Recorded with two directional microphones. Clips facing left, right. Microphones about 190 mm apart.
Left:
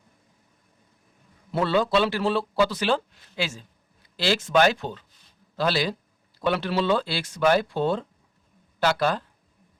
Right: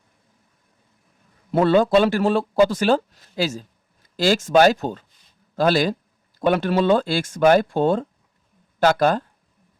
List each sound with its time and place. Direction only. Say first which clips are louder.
1.5 s speech: right 6 dB; 50° right (ahead or behind)